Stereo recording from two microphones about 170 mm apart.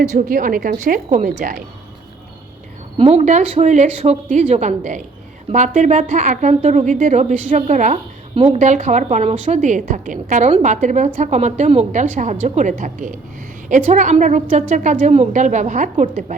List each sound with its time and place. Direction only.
0.0 s a woman's voice: 45° right (ahead or behind)
3.0 s a woman's voice: 40° right (ahead or behind)